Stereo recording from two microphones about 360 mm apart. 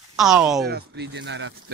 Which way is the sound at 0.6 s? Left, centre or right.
Right.